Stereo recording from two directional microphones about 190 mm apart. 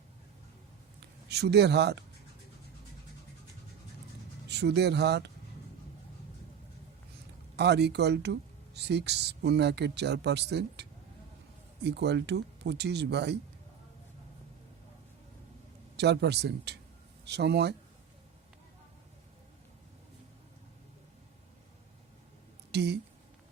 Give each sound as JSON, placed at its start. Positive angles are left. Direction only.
{"t": 1.3, "sound": "speech", "side_deg": -60}
{"t": 4.4, "sound": "speech", "side_deg": -60}
{"t": 7.5, "sound": "speech", "side_deg": -60}
{"t": 16.0, "sound": "speech", "side_deg": -60}
{"t": 22.7, "sound": "a woman's voice", "side_deg": -60}